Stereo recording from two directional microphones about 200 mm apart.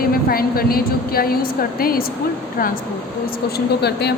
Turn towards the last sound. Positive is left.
turn(degrees=55)  # may be behind; listen again after turning